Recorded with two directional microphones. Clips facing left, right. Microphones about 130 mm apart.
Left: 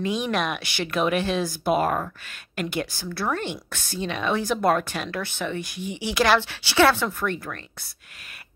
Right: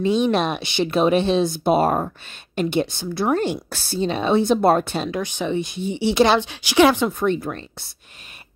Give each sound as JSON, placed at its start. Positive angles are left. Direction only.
{"t": 0.0, "sound": "a woman's voice", "side_deg": -30}
{"t": 5.1, "sound": "a woman's voice", "side_deg": -15}